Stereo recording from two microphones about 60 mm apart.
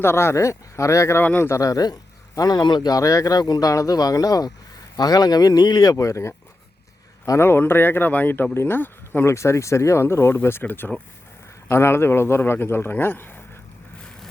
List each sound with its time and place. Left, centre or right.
0.0 s speech: left
1.2 s speech: left
1.5 s speech: left
7.3 s speech: left
9.3 s speech: left
11.7 s speech: left